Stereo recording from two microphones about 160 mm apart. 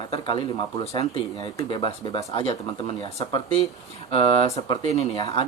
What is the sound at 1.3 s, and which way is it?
Speech, 25° left (ahead or behind).